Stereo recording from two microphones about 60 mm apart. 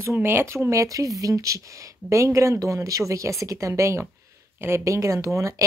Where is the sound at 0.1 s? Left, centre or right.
Right.